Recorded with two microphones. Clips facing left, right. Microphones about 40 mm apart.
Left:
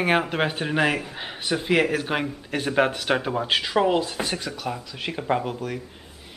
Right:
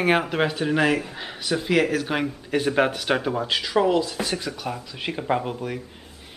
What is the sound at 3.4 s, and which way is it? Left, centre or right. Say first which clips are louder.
Speech: even; centre.